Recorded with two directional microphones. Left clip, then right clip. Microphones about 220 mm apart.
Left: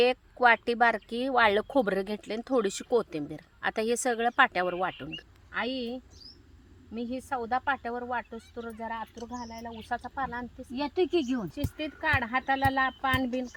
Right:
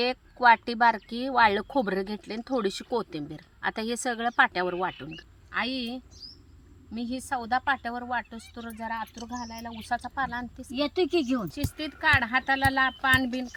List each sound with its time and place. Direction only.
0.0 s speech: 45° left (ahead or behind)
5.5 s speech: 15° left (ahead or behind)
10.8 s speech: 20° right (ahead or behind)
11.5 s speech: 10° left (ahead or behind)